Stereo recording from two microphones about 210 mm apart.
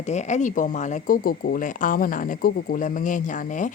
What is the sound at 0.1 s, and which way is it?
Speech, 35° left (ahead or behind).